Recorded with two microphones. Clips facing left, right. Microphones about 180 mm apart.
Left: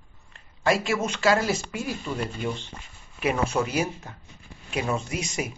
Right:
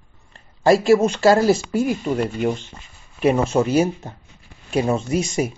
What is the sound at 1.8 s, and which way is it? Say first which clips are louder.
Speech: right 9 dB; 45° right (ahead or behind).